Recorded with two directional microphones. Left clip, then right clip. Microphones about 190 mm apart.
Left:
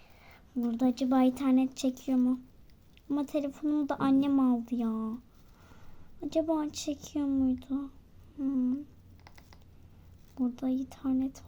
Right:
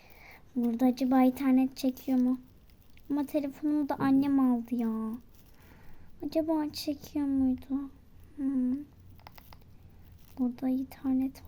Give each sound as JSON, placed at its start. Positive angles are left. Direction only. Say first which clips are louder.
{"t": 0.2, "sound": "a woman's voice", "louder": "right 2 dB", "side_deg": -15}
{"t": 9.2, "sound": "typing", "louder": "right 4 dB", "side_deg": -20}
{"t": 10.3, "sound": "a woman's voice", "louder": "right 1 dB", "side_deg": 0}